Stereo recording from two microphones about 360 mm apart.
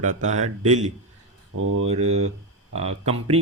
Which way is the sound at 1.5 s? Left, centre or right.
Right.